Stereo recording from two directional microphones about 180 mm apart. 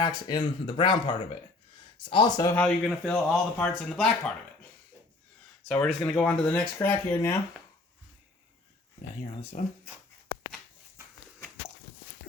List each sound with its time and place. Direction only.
0.0 s speech: 20° left (ahead or behind)
2.6 s speech: 5° left (ahead or behind)
5.8 s speech: 5° left (ahead or behind)
9.2 s speech: 35° left (ahead or behind)